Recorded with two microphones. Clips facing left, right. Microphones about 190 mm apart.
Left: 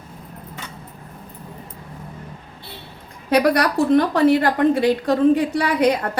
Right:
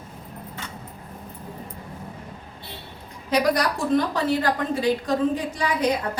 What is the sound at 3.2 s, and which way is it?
A woman's voice, 60° left (ahead or behind).